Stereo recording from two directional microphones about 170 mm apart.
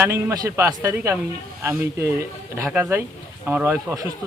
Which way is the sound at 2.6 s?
Centre (ahead or behind).